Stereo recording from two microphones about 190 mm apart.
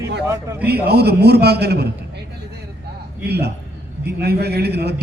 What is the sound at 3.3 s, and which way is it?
A man's voice, 60° right (ahead or behind).